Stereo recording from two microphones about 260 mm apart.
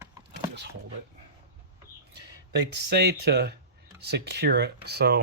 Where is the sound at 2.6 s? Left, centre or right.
Right.